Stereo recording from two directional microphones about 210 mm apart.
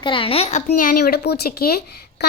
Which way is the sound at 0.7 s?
45° left (ahead or behind).